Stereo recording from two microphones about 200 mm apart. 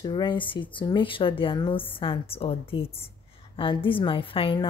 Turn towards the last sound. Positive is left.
turn(degrees=25)  # may be behind; listen again after turning